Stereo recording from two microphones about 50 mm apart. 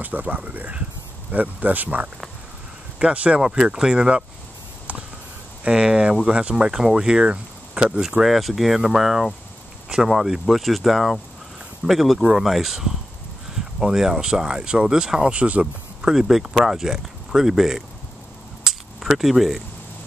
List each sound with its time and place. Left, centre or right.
0.0 s speech: right
3.0 s speech: centre
5.6 s speech: centre
8.2 s speech: centre
18.7 s camera: centre